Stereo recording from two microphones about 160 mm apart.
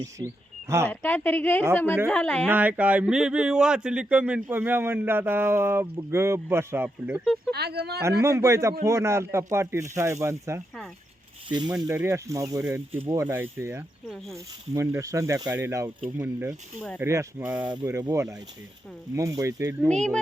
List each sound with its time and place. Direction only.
0.9 s a woman's voice: 10° left (ahead or behind)
2.5 s speech: 10° right (ahead or behind)
7.5 s speech: 90° right
8.2 s speech: 20° right (ahead or behind)
11.7 s speech: 15° right (ahead or behind)
16.0 s speech: 30° right (ahead or behind)
16.2 s speech: 15° right (ahead or behind)
19.9 s speech: 5° left (ahead or behind)